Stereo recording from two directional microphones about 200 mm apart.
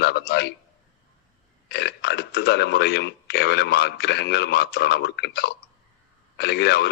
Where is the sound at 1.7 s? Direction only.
55° left (ahead or behind).